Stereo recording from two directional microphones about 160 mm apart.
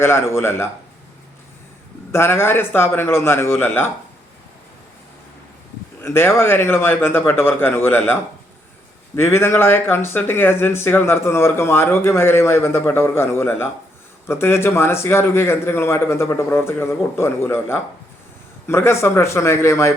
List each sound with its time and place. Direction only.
0.0 s speech: 15° left (ahead or behind)
2.1 s speech: 15° left (ahead or behind)
6.0 s speech: 15° left (ahead or behind)